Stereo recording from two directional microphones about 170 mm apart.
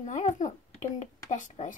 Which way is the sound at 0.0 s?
45° left (ahead or behind).